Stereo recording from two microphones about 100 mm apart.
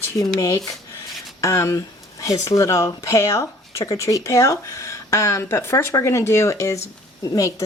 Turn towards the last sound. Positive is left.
turn(degrees=35)  # may be behind; listen again after turning